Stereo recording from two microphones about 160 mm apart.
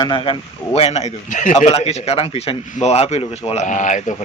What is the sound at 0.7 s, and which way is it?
A man's voice, 40° left (ahead or behind).